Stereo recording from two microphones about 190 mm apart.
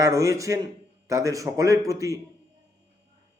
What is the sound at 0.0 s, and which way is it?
A man's voice, 15° right (ahead or behind).